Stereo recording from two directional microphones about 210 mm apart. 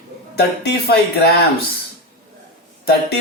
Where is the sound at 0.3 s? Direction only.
50° left (ahead or behind).